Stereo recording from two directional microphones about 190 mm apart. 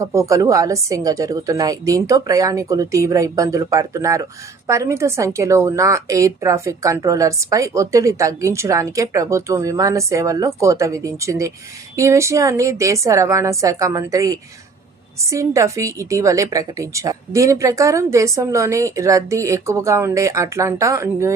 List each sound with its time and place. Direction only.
0.0 s a woman's voice: 15° right (ahead or behind)